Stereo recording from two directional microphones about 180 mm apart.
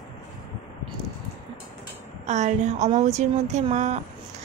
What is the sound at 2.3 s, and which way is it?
A woman's voice, 40° right (ahead or behind).